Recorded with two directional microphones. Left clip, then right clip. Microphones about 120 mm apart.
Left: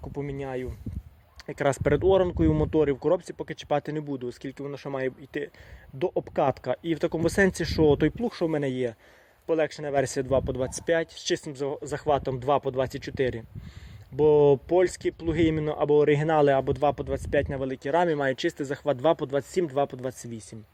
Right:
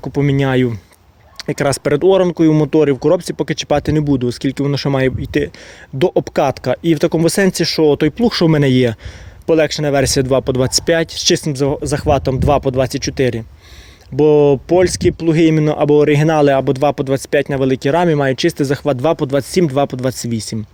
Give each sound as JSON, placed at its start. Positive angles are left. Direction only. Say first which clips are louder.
{"t": 0.0, "sound": "speech", "louder": "right 17 dB", "side_deg": -50}
{"t": 1.4, "sound": "speech", "louder": "right 9 dB", "side_deg": -25}
{"t": 8.1, "sound": "speech", "louder": "right 14 dB", "side_deg": -50}
{"t": 9.5, "sound": "speech", "louder": "right 13 dB", "side_deg": -30}